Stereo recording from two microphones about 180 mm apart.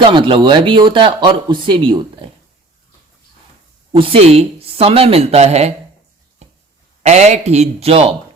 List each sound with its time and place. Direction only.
0.0 s speech: 30° right (ahead or behind)
3.9 s speech: 30° right (ahead or behind)
7.0 s speech: 40° right (ahead or behind)